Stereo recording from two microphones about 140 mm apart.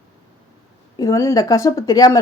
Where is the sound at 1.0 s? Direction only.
20° left (ahead or behind).